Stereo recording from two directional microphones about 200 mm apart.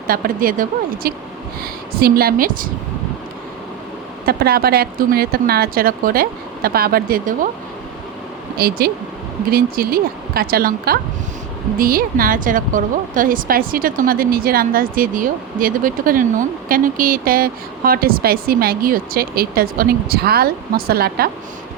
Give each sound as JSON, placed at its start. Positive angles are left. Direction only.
{"t": 0.1, "sound": "speech", "side_deg": -45}
{"t": 4.3, "sound": "speech", "side_deg": -50}
{"t": 8.5, "sound": "speech", "side_deg": -50}